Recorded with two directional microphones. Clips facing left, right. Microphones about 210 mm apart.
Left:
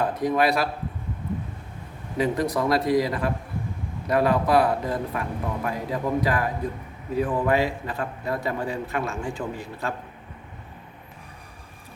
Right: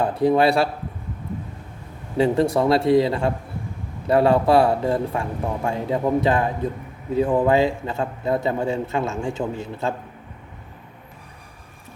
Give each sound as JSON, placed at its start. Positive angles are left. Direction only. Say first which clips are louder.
{"t": 0.0, "sound": "speech", "louder": "right 5 dB", "side_deg": -30}
{"t": 2.1, "sound": "a man's voice", "louder": "right 5 dB", "side_deg": -30}